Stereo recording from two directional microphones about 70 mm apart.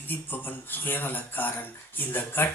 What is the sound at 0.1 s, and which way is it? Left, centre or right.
Speech, left.